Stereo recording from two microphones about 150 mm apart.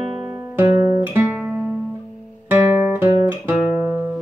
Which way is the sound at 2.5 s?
10° right (ahead or behind).